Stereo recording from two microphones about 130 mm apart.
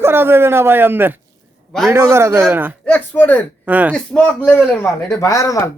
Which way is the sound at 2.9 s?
15° left (ahead or behind).